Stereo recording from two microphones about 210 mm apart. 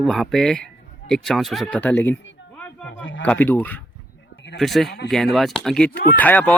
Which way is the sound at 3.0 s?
65° left (ahead or behind).